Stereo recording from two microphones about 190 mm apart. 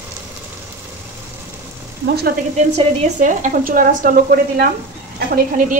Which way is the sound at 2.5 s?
40° right (ahead or behind).